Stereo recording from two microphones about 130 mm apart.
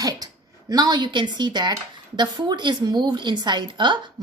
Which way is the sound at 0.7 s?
30° right (ahead or behind).